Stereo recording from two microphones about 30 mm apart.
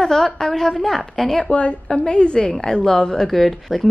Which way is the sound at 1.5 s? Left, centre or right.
Left.